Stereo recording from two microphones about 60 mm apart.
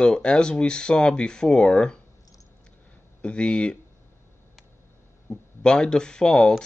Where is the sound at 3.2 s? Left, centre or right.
Centre.